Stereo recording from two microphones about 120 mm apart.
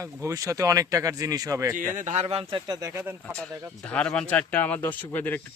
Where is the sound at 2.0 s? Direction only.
80° right; by 2.6 s 55° right (ahead or behind).